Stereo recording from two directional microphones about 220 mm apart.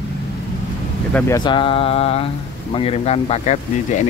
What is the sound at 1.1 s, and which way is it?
Speech, 15° left (ahead or behind).